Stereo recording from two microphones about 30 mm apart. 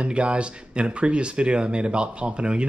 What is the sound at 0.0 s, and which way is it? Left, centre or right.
Speech, right.